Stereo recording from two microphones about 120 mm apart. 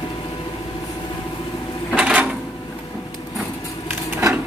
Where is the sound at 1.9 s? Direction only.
10° right (ahead or behind).